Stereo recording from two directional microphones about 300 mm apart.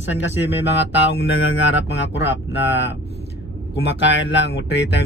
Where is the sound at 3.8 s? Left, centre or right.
Left.